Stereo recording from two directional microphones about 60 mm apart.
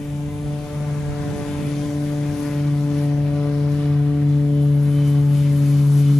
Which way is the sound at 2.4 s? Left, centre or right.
Centre.